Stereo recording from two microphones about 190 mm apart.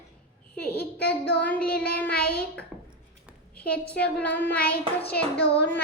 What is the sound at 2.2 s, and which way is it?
Child singing, 55° left (ahead or behind).